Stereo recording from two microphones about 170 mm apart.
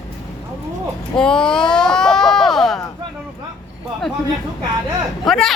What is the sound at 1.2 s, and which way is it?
Speech, 5° left (ahead or behind).